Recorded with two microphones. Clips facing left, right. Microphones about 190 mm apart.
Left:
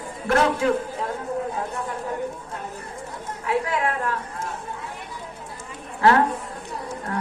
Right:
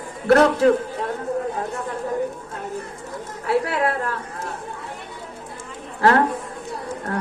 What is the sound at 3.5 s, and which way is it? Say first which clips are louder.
A woman's voice: right 3 dB; 35° right (ahead or behind).